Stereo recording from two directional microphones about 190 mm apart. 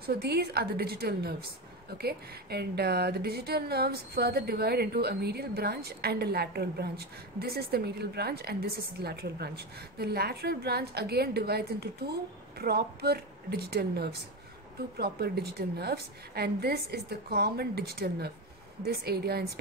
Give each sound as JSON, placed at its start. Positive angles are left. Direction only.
{"t": 0.0, "sound": "speech", "side_deg": -55}